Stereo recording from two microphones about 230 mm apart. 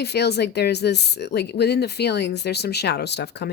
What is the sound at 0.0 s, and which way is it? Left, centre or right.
Speech, left.